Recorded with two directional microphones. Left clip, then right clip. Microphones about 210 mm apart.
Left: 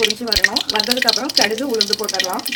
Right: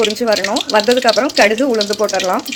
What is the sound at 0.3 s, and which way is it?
Speech, 40° right (ahead or behind).